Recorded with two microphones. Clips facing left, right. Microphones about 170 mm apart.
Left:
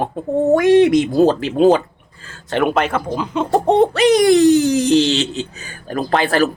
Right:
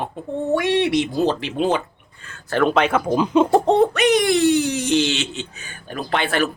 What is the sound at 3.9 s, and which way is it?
Speech, 35° left (ahead or behind).